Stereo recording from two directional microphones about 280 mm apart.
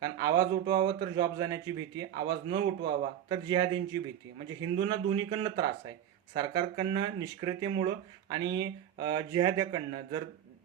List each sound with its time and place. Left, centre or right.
0.0 s speech: centre